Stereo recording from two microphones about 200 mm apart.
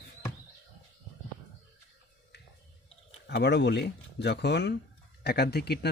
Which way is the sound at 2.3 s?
55° left (ahead or behind).